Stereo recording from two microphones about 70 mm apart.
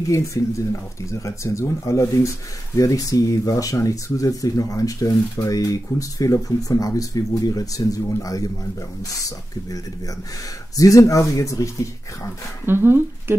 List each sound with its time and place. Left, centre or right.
0.1 s speech: left
10.8 s speech: left
12.6 s speech: right